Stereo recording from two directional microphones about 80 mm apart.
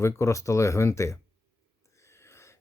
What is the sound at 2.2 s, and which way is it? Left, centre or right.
Wheeze, left.